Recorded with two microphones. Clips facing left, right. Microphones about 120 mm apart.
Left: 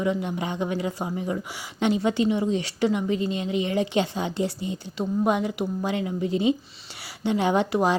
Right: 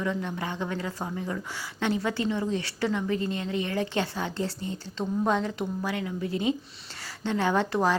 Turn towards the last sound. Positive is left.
turn(degrees=15)  # may be behind; listen again after turning